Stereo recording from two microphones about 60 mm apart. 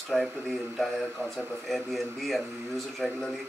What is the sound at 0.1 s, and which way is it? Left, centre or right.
Speech, centre.